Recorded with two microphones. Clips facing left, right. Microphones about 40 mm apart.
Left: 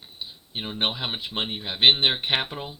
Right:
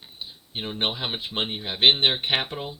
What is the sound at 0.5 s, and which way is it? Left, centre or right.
Speech, centre.